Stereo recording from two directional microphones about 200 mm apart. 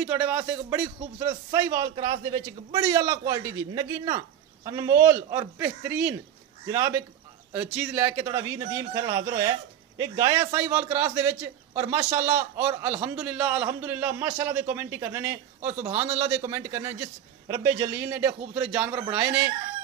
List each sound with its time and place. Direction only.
0.0 s a man's voice: 10° right (ahead or behind)